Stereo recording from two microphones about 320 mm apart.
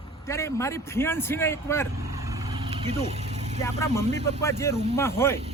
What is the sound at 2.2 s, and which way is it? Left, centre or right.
Vehicle, centre.